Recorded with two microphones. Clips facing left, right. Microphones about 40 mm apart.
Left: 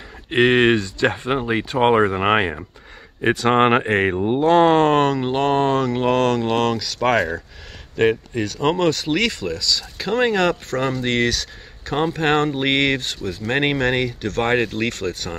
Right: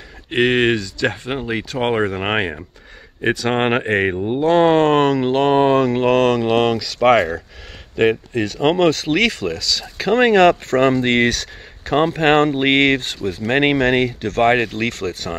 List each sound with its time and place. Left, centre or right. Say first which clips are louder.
0.3 s speech: left 1 dB; centre
0.7 s speech: left 2 dB; left
1.4 s speech: left 1 dB; centre
1.8 s speech: left 3 dB; centre
4.2 s speech: left 1 dB; centre
4.5 s speech: right 1 dB; centre
6.2 s speech: right 3 dB; centre
10.1 s speech: right 6 dB; right; by 15.3 s centre